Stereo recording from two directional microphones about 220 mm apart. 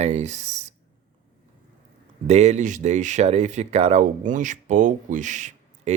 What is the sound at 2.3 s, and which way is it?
Speech, 30° right (ahead or behind).